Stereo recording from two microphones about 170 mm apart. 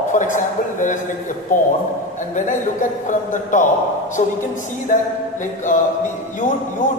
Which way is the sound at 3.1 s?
50° left (ahead or behind).